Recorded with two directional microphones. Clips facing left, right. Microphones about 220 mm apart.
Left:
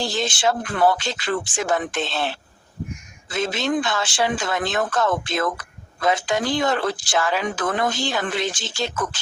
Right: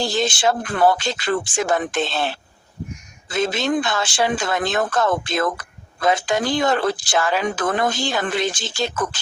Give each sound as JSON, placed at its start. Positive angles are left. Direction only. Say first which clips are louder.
{"t": 0.0, "sound": "speech", "louder": "right 2 dB", "side_deg": -40}
{"t": 3.3, "sound": "speech", "louder": "right 2 dB", "side_deg": -40}